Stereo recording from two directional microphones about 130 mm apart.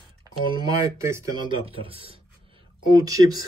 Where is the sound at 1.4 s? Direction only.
40° right (ahead or behind).